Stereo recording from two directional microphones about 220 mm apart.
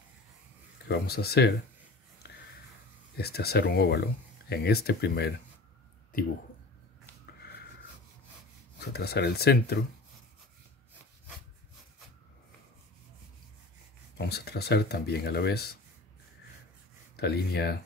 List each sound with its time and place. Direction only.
0.8 s speech: 45° left (ahead or behind)
3.2 s speech: 45° left (ahead or behind)
8.7 s speech: 45° left (ahead or behind)
14.1 s speech: 45° left (ahead or behind)
17.2 s speech: 45° left (ahead or behind)